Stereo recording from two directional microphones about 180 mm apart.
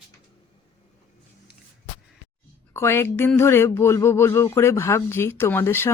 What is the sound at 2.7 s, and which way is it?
Speech, 15° left (ahead or behind).